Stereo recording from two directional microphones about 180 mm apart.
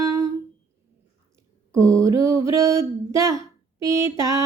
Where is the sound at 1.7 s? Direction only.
15° right (ahead or behind).